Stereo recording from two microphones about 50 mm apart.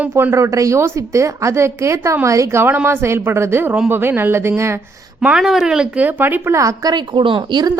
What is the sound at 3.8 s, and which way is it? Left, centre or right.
Speech, right.